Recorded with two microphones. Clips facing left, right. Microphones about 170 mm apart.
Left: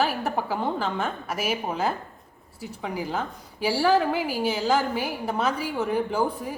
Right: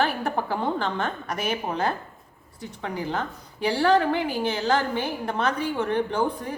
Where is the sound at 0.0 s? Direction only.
5° left (ahead or behind).